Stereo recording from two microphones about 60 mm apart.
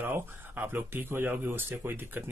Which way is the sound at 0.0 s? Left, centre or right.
Right.